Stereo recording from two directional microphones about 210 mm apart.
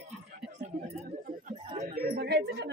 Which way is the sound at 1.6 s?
20° right (ahead or behind).